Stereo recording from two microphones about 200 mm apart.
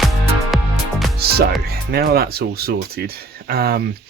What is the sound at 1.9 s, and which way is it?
Speech, 50° right (ahead or behind).